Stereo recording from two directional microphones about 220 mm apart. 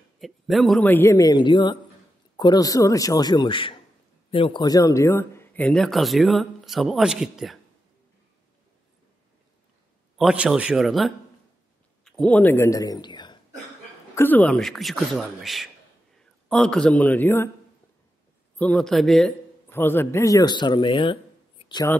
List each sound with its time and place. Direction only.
0.2 s a man's voice: centre (ahead or behind)
10.1 s a man's voice: 5° right (ahead or behind); by 13.4 s 20° left (ahead or behind)
14.1 s a man's voice: 10° left (ahead or behind)
18.6 s a man's voice: 5° left (ahead or behind); by 21.8 s 20° left (ahead or behind)